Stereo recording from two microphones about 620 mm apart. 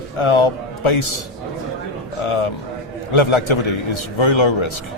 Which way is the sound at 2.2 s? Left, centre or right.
Left.